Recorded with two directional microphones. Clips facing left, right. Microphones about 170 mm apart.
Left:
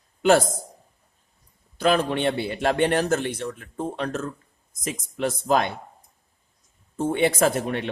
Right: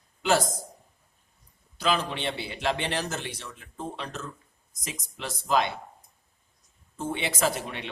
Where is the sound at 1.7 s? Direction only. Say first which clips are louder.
Left 6 dB; 55° left (ahead or behind).